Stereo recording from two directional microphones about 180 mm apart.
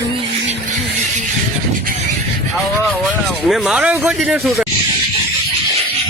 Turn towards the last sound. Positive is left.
turn(degrees=0)  # may be behind; listen again after turning